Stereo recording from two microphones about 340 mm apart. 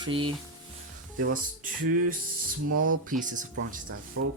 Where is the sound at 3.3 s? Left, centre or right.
Right.